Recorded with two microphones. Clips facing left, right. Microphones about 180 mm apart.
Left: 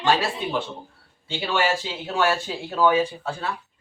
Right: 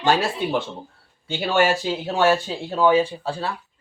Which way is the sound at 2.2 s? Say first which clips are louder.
Right 4 dB; 30° right (ahead or behind).